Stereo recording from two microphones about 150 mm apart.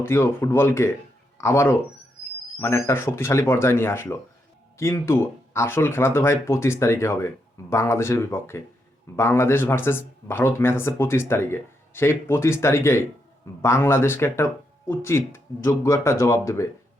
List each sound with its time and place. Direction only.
0.0 s speech: 15° left (ahead or behind)